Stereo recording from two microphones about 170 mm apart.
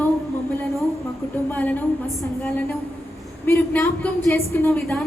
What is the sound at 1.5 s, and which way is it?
A woman's voice, 10° left (ahead or behind).